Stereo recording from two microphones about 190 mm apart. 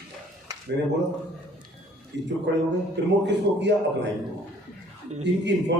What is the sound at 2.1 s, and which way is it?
A man's voice, 70° right (ahead or behind).